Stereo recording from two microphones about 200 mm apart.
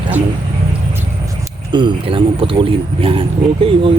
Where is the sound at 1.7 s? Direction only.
25° right (ahead or behind).